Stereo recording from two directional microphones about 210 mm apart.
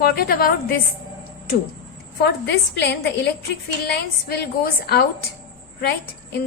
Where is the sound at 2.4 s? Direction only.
55° left (ahead or behind).